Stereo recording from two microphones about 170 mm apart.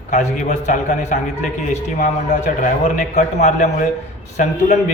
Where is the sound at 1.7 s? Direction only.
45° left (ahead or behind).